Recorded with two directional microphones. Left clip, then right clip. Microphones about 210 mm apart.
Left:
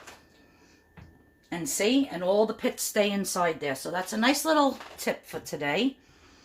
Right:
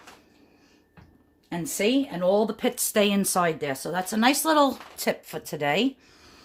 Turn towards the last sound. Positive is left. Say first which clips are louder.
# right 2 dB
turn(degrees=-40)  # may be behind; listen again after turning